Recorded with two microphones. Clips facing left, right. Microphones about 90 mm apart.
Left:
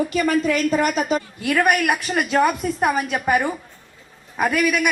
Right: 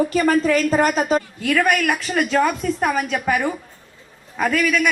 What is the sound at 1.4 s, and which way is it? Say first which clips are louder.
A woman's voice: left 2 dB; 15° left (ahead or behind).